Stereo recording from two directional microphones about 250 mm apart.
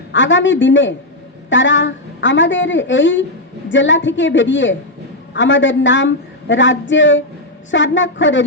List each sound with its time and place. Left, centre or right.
0.1 s speech: left